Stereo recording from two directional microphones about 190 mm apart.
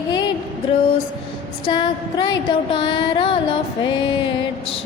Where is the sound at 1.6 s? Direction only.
25° left (ahead or behind).